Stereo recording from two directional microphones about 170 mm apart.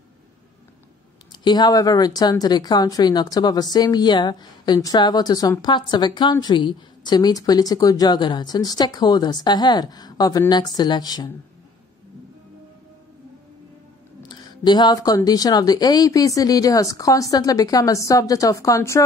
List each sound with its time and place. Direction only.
1.3 s a woman's voice: 25° left (ahead or behind)
14.2 s a woman's voice: 25° left (ahead or behind)